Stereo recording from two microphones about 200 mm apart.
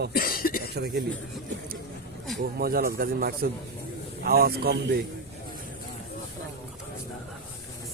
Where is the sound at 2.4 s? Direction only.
50° right (ahead or behind).